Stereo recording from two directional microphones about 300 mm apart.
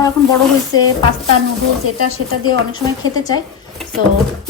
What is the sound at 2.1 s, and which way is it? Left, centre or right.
Speech, left.